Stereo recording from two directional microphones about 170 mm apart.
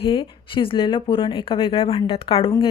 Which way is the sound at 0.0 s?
30° left (ahead or behind).